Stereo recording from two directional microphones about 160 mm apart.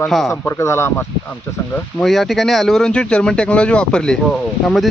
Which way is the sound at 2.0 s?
Centre (ahead or behind).